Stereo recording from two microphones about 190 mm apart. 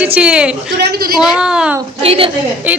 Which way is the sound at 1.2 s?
5° right (ahead or behind).